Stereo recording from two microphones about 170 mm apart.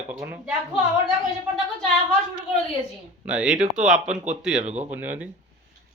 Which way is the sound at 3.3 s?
5° right (ahead or behind).